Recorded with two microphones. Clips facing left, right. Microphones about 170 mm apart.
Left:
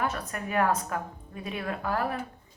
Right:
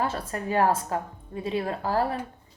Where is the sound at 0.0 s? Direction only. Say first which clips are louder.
Right 3 dB; 30° right (ahead or behind).